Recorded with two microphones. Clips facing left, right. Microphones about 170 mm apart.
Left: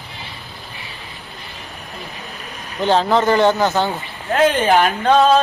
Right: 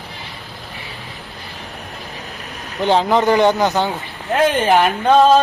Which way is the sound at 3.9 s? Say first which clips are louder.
Right 1 dB; centre (ahead or behind).